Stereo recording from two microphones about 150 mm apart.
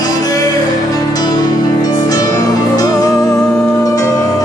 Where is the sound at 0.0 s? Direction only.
25° left (ahead or behind).